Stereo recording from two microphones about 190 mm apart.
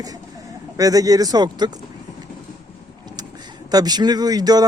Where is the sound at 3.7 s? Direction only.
20° right (ahead or behind).